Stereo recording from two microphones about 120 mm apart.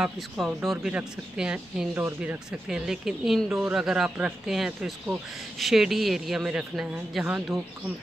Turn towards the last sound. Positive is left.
turn(degrees=-5)  # may be behind; listen again after turning